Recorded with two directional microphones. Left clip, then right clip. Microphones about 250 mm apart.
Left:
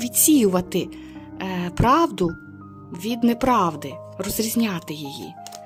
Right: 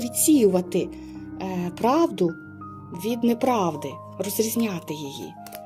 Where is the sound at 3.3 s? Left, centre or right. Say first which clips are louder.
Left 4 dB; left.